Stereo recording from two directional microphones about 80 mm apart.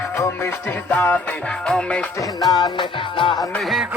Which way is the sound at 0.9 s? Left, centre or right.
Left.